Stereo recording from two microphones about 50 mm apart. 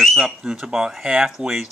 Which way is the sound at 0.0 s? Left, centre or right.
Centre.